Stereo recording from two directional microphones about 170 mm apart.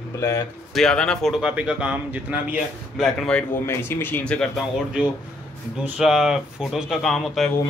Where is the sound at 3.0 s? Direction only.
Centre (ahead or behind).